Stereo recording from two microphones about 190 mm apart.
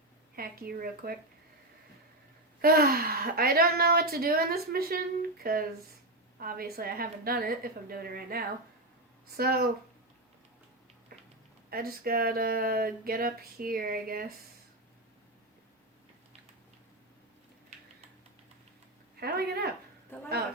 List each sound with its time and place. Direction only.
0.3 s speech: 50° right (ahead or behind)
2.6 s speech: 50° right (ahead or behind)
11.1 s a sound: 50° right (ahead or behind)
11.7 s speech: 50° right (ahead or behind)
19.2 s speech: 55° right (ahead or behind)